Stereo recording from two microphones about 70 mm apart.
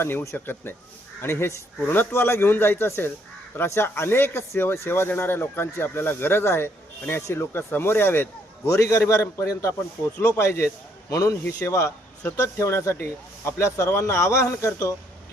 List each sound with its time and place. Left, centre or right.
0.0 s speech: left
11.1 s a man's voice: left
11.6 s speech: left